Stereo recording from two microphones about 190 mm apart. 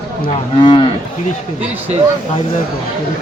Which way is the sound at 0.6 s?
25° left (ahead or behind).